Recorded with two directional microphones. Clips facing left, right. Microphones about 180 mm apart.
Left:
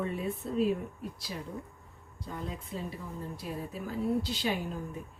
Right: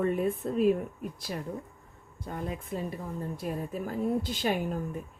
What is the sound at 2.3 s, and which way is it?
A woman's voice, 50° right (ahead or behind).